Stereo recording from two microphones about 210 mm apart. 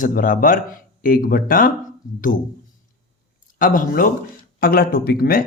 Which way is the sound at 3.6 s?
40° left (ahead or behind).